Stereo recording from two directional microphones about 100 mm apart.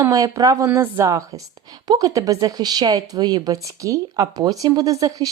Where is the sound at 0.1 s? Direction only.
35° right (ahead or behind).